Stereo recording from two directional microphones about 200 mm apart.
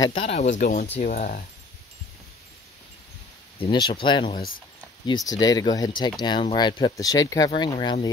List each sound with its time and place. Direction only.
0.0 s speech: 30° left (ahead or behind)
0.6 s speech: 45° left (ahead or behind)
3.5 s speech: 25° left (ahead or behind)